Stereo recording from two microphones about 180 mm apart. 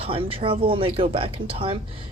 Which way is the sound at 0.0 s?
30° right (ahead or behind).